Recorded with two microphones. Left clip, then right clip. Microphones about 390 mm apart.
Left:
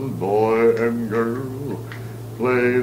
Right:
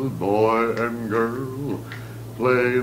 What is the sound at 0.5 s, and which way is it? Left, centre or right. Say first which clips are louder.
Mantra: left 4 dB; right.